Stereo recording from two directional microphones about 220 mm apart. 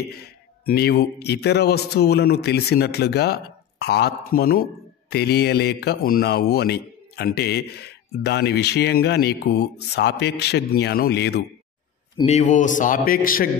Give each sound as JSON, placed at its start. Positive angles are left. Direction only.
{"t": 0.7, "sound": "speech", "side_deg": 45}
{"t": 12.2, "sound": "a man's voice", "side_deg": 30}